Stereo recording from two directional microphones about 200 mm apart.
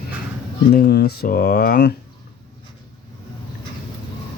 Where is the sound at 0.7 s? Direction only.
50° left (ahead or behind).